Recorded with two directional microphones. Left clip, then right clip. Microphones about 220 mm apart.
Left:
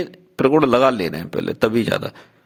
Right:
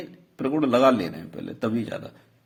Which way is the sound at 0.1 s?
40° left (ahead or behind).